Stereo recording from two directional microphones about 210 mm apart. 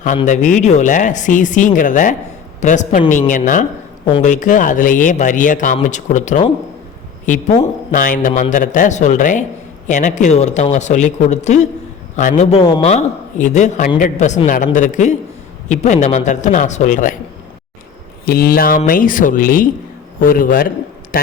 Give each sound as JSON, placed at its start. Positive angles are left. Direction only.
{"t": 0.3, "sound": "speech", "side_deg": 35}
{"t": 18.3, "sound": "a man's voice", "side_deg": 45}